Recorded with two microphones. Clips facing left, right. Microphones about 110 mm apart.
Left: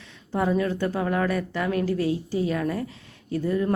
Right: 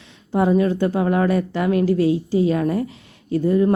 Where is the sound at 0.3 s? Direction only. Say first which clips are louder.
Right 6 dB; 20° right (ahead or behind).